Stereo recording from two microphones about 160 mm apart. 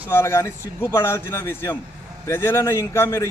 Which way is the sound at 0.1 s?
15° left (ahead or behind).